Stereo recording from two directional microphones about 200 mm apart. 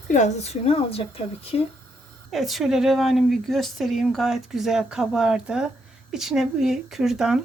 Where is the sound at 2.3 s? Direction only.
Centre (ahead or behind).